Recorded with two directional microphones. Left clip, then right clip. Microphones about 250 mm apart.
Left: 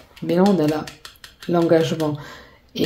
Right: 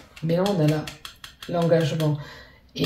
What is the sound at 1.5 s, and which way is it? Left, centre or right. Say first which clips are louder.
Speech: left 5 dB; left.